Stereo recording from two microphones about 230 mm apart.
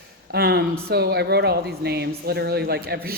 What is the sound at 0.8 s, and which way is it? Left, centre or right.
A woman's voice, right.